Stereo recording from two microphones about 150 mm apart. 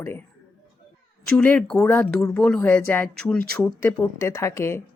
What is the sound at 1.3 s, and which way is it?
Speech, 10° left (ahead or behind).